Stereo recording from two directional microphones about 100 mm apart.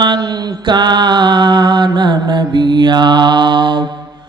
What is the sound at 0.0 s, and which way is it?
Mantra, 45° right (ahead or behind).